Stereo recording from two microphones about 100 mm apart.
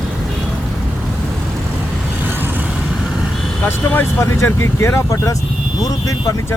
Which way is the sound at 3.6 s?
25° left (ahead or behind).